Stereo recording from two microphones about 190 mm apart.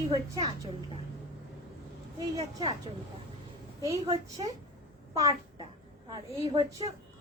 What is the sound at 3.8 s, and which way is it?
A woman's voice, 15° right (ahead or behind).